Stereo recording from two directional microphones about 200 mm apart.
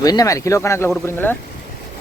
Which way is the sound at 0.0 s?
20° left (ahead or behind).